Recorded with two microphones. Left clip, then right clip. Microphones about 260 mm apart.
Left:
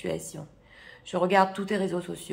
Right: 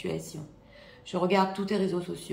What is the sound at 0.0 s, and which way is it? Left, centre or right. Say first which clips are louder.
Speech: left 2 dB; centre.